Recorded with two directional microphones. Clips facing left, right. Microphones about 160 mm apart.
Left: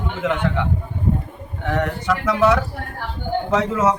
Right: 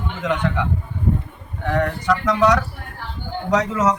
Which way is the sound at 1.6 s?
5° left (ahead or behind).